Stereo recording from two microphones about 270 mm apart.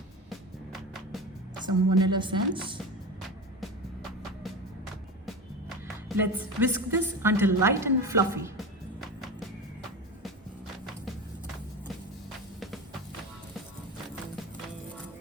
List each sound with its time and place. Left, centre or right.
0.3 s music: centre
1.6 s a woman's voice: centre
6.1 s a woman's voice: centre